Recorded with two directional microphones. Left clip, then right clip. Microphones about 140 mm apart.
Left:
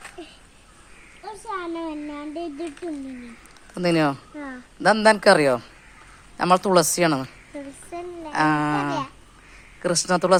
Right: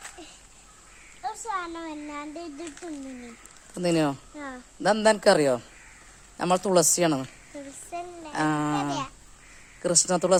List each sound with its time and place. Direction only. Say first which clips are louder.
1.5 s speech: left 3 dB; 10° right (ahead or behind)
3.8 s speech: left 4 dB; 25° right (ahead or behind)
4.4 s speech: left 3 dB; 5° right (ahead or behind)
4.8 s speech: left 5 dB; 25° right (ahead or behind)
7.9 s a sound: left 1 dB; 5° right (ahead or behind)
8.3 s a sound: left 6 dB; 30° right (ahead or behind)